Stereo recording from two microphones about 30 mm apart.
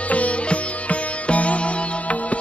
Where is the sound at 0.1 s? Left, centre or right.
Left.